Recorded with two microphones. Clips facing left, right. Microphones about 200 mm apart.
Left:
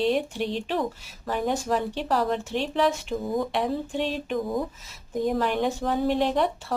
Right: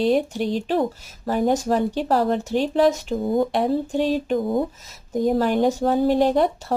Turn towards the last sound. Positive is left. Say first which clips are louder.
# right 5 dB
turn(degrees=-40)  # may be behind; listen again after turning